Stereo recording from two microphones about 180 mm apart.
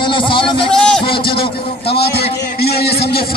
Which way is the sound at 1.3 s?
30° left (ahead or behind).